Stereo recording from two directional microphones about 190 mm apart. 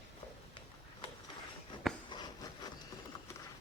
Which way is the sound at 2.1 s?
20° left (ahead or behind).